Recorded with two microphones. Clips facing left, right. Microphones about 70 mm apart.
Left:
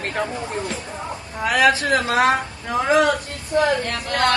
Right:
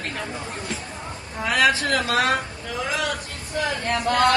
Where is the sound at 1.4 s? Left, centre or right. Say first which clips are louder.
Left 3 dB; centre.